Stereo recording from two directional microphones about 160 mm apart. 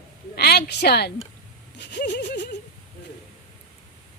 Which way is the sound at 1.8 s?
90° left.